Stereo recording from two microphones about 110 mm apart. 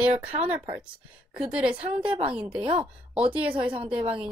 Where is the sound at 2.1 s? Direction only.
55° right (ahead or behind).